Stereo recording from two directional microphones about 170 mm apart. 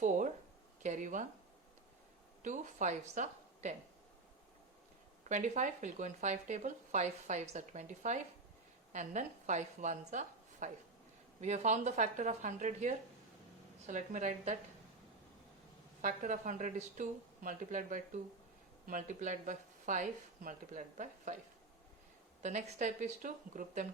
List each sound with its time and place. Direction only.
0.8 s speech: 45° right (ahead or behind)
2.4 s a woman's voice: 45° right (ahead or behind)
5.3 s a woman's voice: 45° right (ahead or behind)
16.0 s speech: 50° right (ahead or behind)
22.4 s speech: 45° right (ahead or behind)